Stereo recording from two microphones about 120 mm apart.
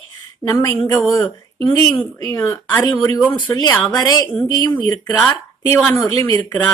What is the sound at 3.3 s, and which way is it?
Speech, 45° left (ahead or behind).